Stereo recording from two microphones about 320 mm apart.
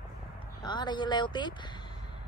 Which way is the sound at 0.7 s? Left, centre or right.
Centre.